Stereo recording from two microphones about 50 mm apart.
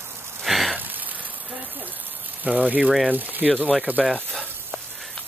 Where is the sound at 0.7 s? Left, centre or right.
Right.